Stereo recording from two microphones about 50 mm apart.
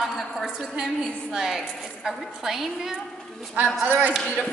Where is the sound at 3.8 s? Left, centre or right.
Right.